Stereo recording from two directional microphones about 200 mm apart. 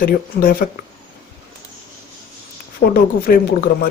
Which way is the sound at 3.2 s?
50° left (ahead or behind).